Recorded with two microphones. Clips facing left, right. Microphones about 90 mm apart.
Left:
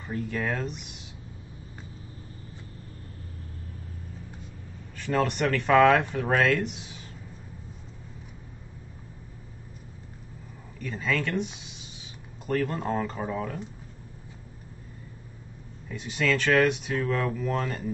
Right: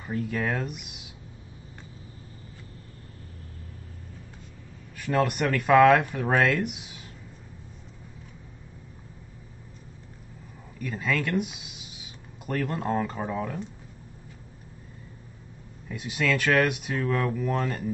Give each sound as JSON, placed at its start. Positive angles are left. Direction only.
{"t": 0.0, "sound": "speech", "side_deg": -5}
{"t": 4.9, "sound": "speech", "side_deg": -10}
{"t": 10.8, "sound": "speech", "side_deg": -5}
{"t": 15.9, "sound": "speech", "side_deg": -5}